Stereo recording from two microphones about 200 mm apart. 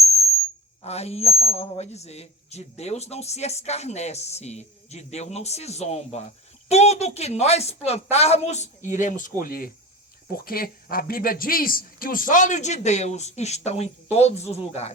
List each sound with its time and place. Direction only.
0.8 s a man's voice: 30° left (ahead or behind)